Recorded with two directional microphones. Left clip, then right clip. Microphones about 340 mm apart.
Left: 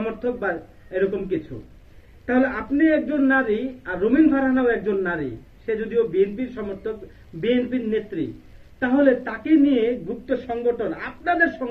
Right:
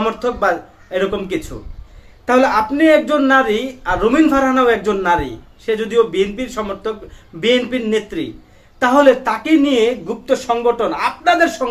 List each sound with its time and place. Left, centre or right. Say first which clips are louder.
0.0 s speech: right 8 dB; right
2.2 s speech: right 9 dB; right
7.4 s speech: right 7 dB; right